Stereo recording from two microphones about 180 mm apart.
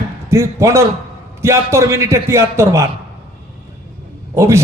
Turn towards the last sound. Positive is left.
turn(degrees=-15)  # may be behind; listen again after turning